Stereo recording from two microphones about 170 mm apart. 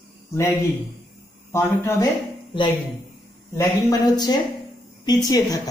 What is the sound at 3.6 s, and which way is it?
A woman's voice, 20° left (ahead or behind).